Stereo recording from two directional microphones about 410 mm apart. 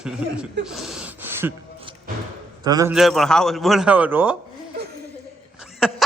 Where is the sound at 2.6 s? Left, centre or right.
Centre.